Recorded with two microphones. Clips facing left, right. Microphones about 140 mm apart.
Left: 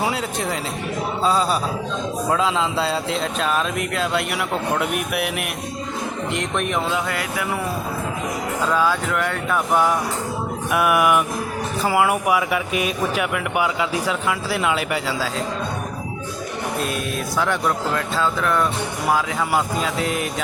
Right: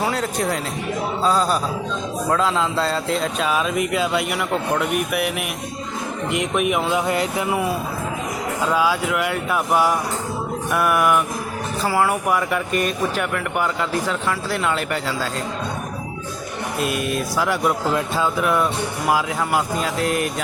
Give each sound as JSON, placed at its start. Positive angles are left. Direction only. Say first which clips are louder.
{"t": 0.0, "sound": "speech", "louder": "right 1 dB", "side_deg": 5}
{"t": 7.1, "sound": "music", "louder": "right 4 dB", "side_deg": -25}
{"t": 8.7, "sound": "speech", "louder": "right 1 dB", "side_deg": -10}
{"t": 16.8, "sound": "speech", "louder": "right 2 dB", "side_deg": 0}